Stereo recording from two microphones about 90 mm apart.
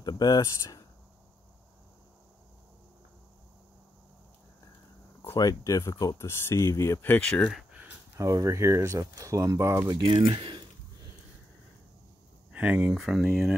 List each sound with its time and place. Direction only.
0.0 s speech: 45° left (ahead or behind)
5.3 s speech: 40° left (ahead or behind)
7.0 s speech: 15° left (ahead or behind)
8.2 s speech: 35° right (ahead or behind)
10.0 s speech: 75° right (ahead or behind)
12.5 s speech: 15° right (ahead or behind)
12.9 s speech: 5° right (ahead or behind)